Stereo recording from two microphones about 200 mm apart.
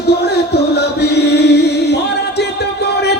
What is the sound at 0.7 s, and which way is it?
Chant, 55° left (ahead or behind).